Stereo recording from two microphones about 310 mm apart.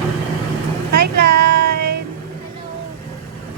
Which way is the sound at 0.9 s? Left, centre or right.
Right.